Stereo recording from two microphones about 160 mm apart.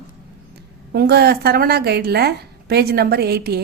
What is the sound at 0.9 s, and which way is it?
A woman's voice, 85° right.